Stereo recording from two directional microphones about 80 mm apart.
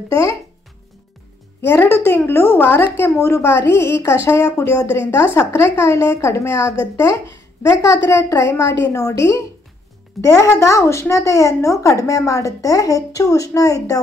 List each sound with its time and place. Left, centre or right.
1.6 s a woman's voice: left